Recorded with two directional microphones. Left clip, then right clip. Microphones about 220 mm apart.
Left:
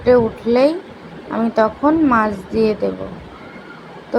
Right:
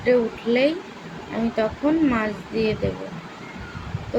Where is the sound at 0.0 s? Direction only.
20° left (ahead or behind).